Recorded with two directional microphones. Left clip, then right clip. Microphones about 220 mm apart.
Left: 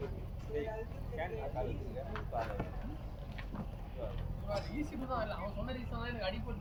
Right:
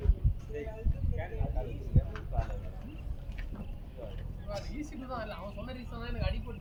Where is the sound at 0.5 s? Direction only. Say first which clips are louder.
Left 2 dB; 10° left (ahead or behind).